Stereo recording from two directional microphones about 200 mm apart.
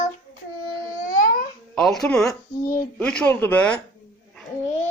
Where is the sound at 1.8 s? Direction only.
5° left (ahead or behind).